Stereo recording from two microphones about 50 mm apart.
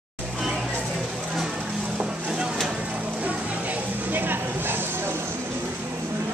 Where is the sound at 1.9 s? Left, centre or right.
Centre.